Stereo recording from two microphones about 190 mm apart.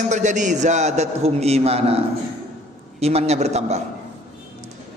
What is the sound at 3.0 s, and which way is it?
Speech, 35° right (ahead or behind).